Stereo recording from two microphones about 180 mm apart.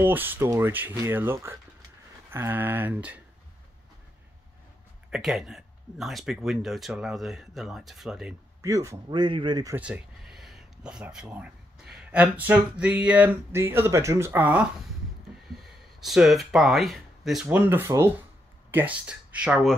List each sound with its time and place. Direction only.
0.0 s speech: 10° right (ahead or behind)
5.1 s speech: centre (ahead or behind)
8.6 s speech: 20° right (ahead or behind)
9.8 s speech: 5° right (ahead or behind)